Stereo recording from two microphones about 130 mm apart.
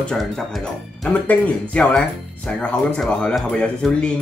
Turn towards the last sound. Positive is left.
turn(degrees=5)  # may be behind; listen again after turning